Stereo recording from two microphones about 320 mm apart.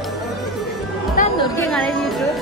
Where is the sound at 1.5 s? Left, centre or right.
Centre.